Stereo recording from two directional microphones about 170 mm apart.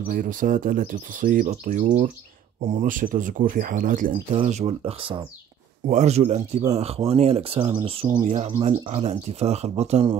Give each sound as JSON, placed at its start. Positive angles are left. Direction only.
{"t": 0.1, "sound": "speech", "side_deg": -50}
{"t": 4.4, "sound": "speech", "side_deg": -40}